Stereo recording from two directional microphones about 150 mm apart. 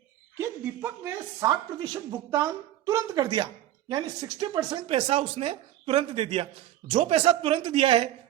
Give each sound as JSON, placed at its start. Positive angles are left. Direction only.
{"t": 0.3, "sound": "speech", "side_deg": -15}